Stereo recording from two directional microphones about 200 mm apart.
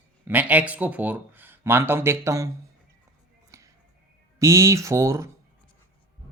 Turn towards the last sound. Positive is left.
turn(degrees=-15)  # may be behind; listen again after turning